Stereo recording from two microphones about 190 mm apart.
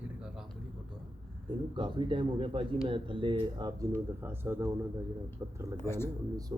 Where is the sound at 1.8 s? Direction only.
25° right (ahead or behind).